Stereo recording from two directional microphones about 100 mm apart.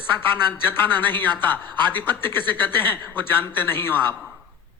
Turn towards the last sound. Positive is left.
turn(degrees=20)  # may be behind; listen again after turning